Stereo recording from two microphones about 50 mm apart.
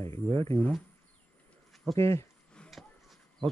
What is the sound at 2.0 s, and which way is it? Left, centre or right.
Speech, left.